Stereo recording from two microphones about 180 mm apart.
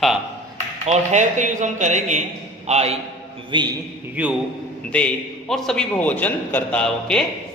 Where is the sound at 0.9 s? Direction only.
40° right (ahead or behind).